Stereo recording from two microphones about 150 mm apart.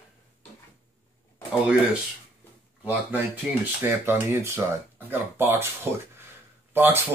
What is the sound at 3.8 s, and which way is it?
Speech, 15° right (ahead or behind).